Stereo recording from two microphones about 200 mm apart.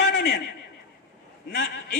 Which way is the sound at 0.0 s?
55° left (ahead or behind).